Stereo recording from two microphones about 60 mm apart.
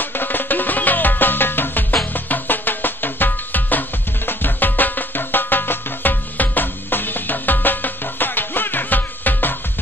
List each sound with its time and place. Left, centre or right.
0.0 s music: left